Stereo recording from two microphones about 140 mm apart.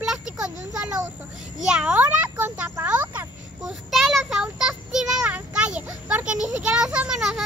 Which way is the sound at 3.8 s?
Centre (ahead or behind).